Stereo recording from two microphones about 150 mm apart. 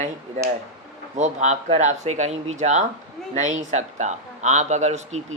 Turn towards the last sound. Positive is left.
turn(degrees=-50)  # may be behind; listen again after turning